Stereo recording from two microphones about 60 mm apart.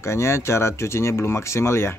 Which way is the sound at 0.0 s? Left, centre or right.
Left.